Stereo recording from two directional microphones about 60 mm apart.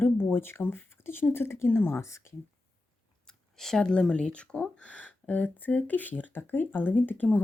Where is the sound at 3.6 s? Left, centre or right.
Centre.